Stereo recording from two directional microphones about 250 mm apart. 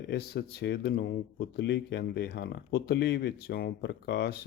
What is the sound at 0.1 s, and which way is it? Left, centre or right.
Speech, left.